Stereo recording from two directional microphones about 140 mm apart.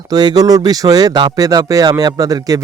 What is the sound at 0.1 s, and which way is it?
Speech, 30° right (ahead or behind).